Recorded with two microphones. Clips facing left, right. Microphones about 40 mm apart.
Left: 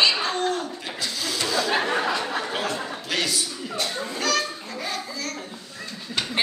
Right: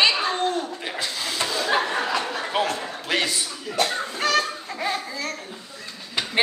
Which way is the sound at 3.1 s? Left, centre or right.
Right.